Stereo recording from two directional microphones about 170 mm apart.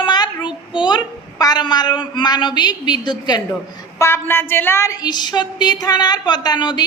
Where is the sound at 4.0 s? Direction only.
15° left (ahead or behind).